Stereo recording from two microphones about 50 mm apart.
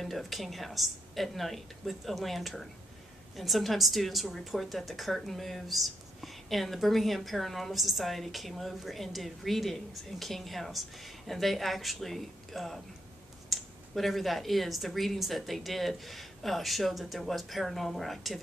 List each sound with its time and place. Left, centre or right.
0.0 s a woman's voice: centre